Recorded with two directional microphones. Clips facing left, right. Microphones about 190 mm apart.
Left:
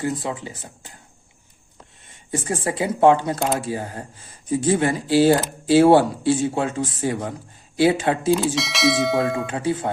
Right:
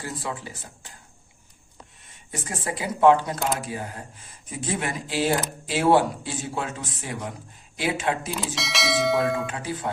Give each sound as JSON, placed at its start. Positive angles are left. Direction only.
{"t": 0.0, "sound": "speech", "side_deg": 20}
{"t": 2.3, "sound": "speech", "side_deg": 30}
{"t": 8.5, "sound": "bell", "side_deg": 0}
{"t": 9.5, "sound": "speech", "side_deg": 25}